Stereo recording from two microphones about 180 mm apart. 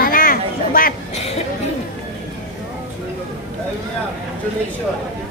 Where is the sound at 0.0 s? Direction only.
50° left (ahead or behind).